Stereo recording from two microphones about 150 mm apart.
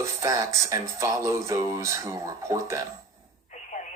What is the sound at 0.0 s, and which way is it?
Speech, 20° right (ahead or behind).